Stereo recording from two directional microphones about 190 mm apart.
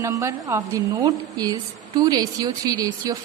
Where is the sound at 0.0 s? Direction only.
15° right (ahead or behind).